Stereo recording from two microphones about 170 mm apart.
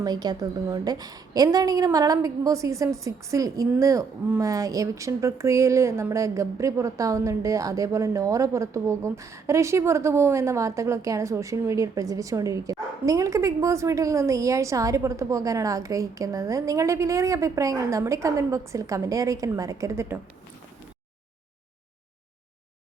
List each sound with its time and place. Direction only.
0.0 s a woman's voice: 25° right (ahead or behind)